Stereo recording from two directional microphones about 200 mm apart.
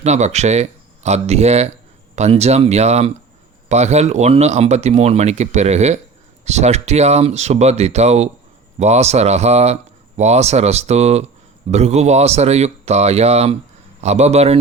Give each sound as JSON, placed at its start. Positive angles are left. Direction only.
{"t": 0.0, "sound": "speech", "side_deg": -35}